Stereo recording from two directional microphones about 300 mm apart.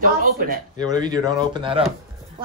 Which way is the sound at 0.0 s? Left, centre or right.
Right.